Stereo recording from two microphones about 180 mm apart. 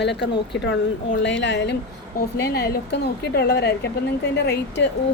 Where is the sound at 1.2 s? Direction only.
85° left.